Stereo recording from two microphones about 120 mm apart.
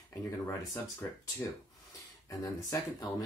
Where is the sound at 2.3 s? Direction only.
30° left (ahead or behind).